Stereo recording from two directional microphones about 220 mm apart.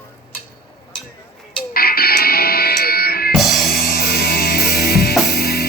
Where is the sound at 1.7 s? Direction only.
45° left (ahead or behind).